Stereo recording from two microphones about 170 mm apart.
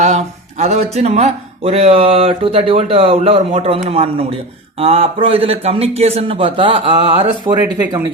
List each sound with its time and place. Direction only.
0.0 s speech: 40° right (ahead or behind); by 8.0 s 25° right (ahead or behind)